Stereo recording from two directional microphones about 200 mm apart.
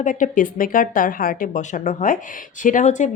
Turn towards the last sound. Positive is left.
turn(degrees=40)  # may be behind; listen again after turning